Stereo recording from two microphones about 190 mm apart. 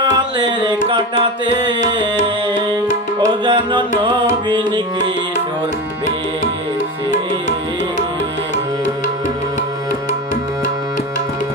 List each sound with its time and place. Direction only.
0.0 s music: 25° right (ahead or behind)
3.2 s music: 25° right (ahead or behind)